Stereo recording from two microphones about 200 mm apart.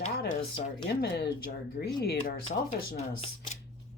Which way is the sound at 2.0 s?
55° left (ahead or behind).